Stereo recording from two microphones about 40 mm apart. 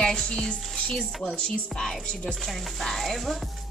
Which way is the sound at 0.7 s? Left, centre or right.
Centre.